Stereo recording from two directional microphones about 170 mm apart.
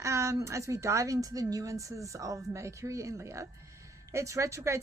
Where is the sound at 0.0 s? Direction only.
15° right (ahead or behind).